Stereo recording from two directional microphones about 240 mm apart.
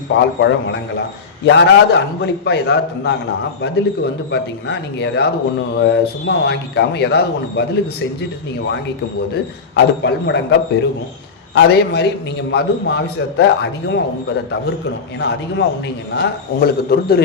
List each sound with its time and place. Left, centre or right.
0.3 s speech: left
9.7 s a man's voice: left